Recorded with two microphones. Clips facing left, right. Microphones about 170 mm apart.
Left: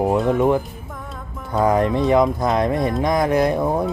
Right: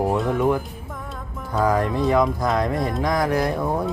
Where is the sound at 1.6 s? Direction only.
20° left (ahead or behind).